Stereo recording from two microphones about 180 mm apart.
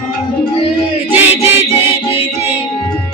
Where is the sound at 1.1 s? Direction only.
15° right (ahead or behind).